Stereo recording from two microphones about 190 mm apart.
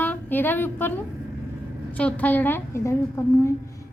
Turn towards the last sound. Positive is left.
turn(degrees=15)  # may be behind; listen again after turning